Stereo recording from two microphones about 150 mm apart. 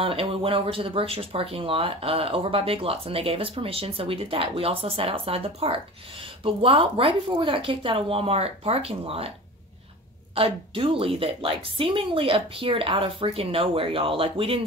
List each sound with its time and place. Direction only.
0.0 s speech: 40° right (ahead or behind)
10.3 s speech: 35° right (ahead or behind)